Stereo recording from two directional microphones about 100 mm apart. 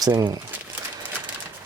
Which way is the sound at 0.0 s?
40° right (ahead or behind).